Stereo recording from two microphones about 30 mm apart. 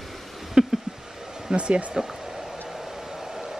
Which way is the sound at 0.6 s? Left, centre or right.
Right.